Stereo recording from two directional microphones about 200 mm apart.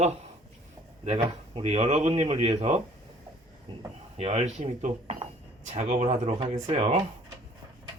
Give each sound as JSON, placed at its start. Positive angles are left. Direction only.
{"t": 1.0, "sound": "speech", "side_deg": -30}
{"t": 4.2, "sound": "speech", "side_deg": -30}